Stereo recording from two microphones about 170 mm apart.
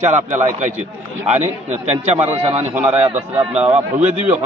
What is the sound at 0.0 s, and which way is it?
Speech, 45° right (ahead or behind).